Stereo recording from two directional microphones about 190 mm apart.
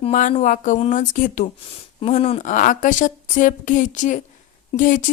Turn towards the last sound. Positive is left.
turn(degrees=40)  # may be behind; listen again after turning